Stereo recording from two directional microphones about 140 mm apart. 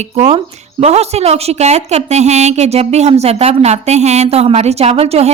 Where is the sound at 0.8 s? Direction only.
50° right (ahead or behind).